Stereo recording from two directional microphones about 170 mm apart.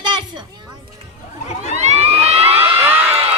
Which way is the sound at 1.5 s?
40° left (ahead or behind).